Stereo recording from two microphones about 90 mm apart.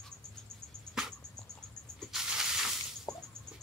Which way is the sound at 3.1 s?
45° left (ahead or behind).